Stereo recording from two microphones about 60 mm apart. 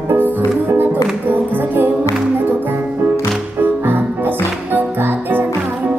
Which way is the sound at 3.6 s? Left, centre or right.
Right.